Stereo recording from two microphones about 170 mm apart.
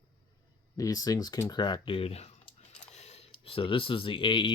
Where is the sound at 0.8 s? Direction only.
20° left (ahead or behind).